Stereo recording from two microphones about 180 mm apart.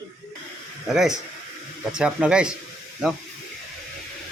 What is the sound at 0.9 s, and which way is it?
Speech, centre (ahead or behind).